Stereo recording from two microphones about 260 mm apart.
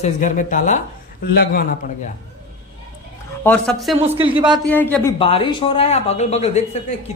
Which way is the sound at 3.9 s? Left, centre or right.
Right.